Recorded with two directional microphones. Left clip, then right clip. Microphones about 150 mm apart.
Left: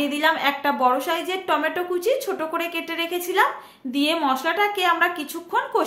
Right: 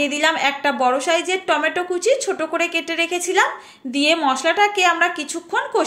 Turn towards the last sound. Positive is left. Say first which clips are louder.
# right 2 dB
turn(degrees=-15)  # may be behind; listen again after turning